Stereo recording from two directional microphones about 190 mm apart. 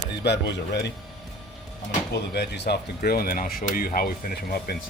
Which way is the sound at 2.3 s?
60° left (ahead or behind).